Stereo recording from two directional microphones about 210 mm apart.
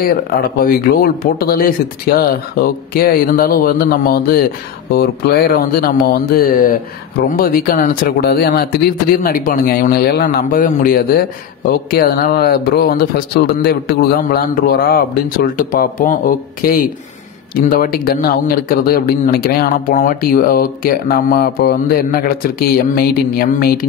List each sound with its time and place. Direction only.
0.0 s a man's voice: 45° left (ahead or behind)